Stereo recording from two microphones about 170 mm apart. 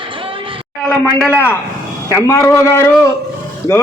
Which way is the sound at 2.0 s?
15° left (ahead or behind).